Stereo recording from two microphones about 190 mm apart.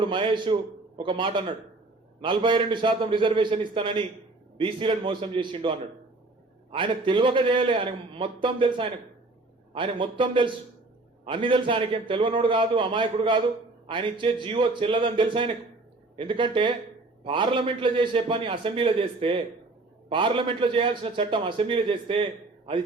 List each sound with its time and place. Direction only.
0.0 s a man's voice: 25° right (ahead or behind)